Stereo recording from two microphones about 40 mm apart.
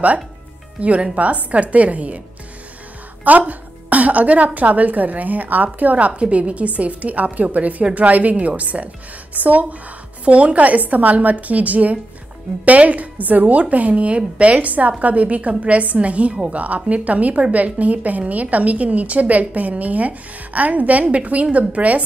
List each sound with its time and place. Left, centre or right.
0.7 s a woman's voice: right
3.3 s a woman's voice: right
5.9 s a woman's voice: right